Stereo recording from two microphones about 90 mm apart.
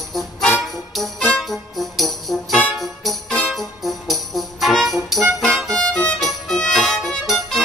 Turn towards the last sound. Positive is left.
turn(degrees=5)  # may be behind; listen again after turning